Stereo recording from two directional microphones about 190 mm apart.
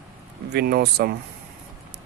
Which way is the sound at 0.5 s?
60° right (ahead or behind).